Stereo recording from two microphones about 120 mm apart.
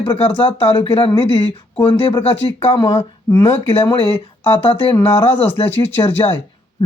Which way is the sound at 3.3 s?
30° left (ahead or behind).